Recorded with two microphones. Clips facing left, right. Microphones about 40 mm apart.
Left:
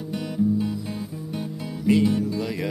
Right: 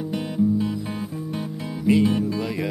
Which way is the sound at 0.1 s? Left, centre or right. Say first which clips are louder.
Right 1 dB; right.